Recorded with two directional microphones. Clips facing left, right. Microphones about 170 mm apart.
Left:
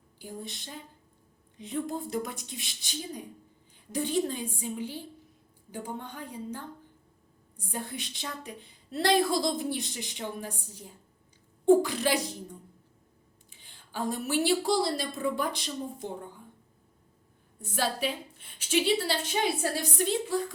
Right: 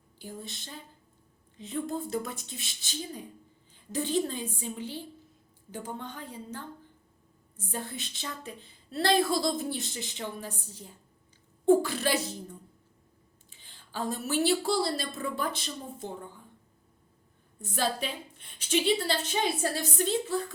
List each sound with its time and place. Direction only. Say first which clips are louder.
0.2 s a woman's voice: left 1 dB; 15° left (ahead or behind)
13.5 s a woman's voice: even; 15° left (ahead or behind)
17.6 s a woman's voice: left 1 dB; 10° left (ahead or behind)